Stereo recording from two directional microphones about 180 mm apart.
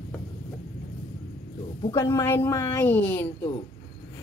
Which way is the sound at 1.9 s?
15° left (ahead or behind).